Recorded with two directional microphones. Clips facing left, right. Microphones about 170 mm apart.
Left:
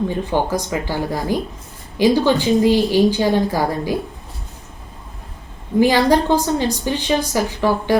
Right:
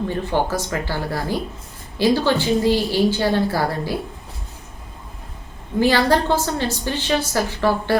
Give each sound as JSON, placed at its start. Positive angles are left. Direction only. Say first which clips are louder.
{"t": 0.1, "sound": "a woman's voice", "louder": "left 2 dB", "side_deg": 15}
{"t": 5.8, "sound": "a woman's voice", "louder": "left 3 dB", "side_deg": 15}